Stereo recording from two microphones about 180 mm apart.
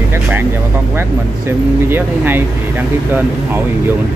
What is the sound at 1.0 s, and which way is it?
Speech, 10° right (ahead or behind).